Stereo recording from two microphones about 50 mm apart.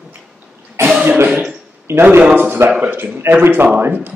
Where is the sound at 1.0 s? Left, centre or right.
Right.